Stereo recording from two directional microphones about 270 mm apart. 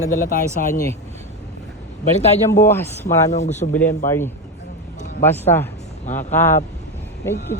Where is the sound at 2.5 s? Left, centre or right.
Centre.